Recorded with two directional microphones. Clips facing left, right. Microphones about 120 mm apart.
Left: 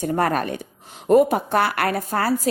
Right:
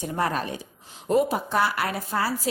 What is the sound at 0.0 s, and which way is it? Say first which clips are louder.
A woman's voice: left 5 dB; 55° left (ahead or behind).